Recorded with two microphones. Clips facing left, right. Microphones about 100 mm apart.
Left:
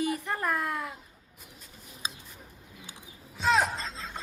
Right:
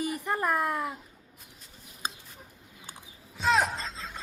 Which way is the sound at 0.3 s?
10° right (ahead or behind).